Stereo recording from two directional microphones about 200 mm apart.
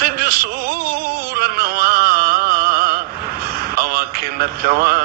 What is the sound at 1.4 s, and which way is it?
Music, 50° right (ahead or behind).